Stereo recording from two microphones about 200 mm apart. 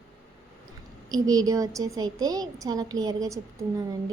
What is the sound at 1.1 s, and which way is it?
A woman's voice, 20° right (ahead or behind).